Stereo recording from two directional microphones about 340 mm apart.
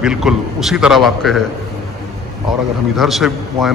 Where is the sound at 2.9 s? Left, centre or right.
Centre.